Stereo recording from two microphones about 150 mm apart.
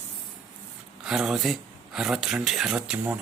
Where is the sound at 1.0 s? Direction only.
5° right (ahead or behind).